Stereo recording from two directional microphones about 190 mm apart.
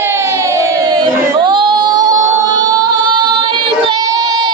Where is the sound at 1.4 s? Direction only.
25° right (ahead or behind).